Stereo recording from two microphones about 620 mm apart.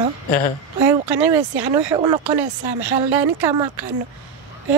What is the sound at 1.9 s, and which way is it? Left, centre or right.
Speech, centre.